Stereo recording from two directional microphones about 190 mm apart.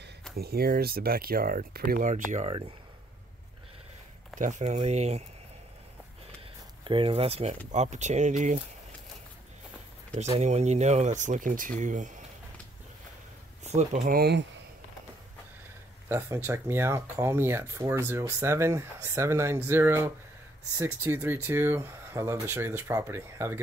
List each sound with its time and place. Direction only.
0.4 s speech: 55° right (ahead or behind)
4.4 s speech: 40° right (ahead or behind)
6.8 s speech: 25° right (ahead or behind)
10.1 s speech: 35° right (ahead or behind)
13.7 s speech: 40° right (ahead or behind)
14.1 s speech: 55° right (ahead or behind)
16.1 s speech: 15° right (ahead or behind)